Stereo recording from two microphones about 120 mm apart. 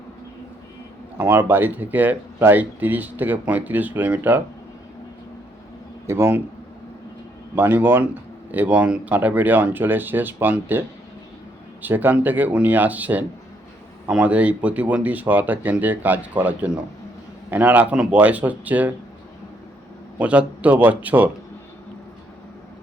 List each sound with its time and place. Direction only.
1.2 s speech: 15° right (ahead or behind)
6.1 s speech: 20° right (ahead or behind)
7.5 s speech: 15° right (ahead or behind)
20.1 s a man's voice: 10° right (ahead or behind)